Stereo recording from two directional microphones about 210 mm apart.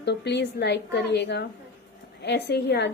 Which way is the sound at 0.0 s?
55° left (ahead or behind).